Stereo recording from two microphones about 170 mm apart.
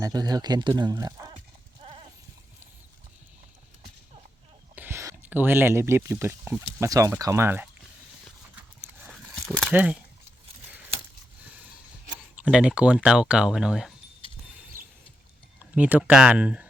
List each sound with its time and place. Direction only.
0.0 s speech: 25° right (ahead or behind)
1.8 s sheep: 30° right (ahead or behind)
4.7 s speech: 10° right (ahead or behind)
9.0 s a sound: centre (ahead or behind)
12.4 s speech: 5° right (ahead or behind)
15.7 s speech: 10° right (ahead or behind)